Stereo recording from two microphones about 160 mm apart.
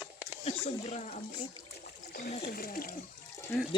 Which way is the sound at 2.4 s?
70° left (ahead or behind).